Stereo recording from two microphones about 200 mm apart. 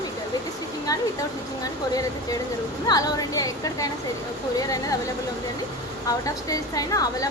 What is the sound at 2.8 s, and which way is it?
A woman's voice, 20° left (ahead or behind).